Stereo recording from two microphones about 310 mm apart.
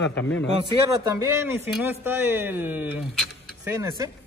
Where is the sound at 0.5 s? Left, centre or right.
Centre.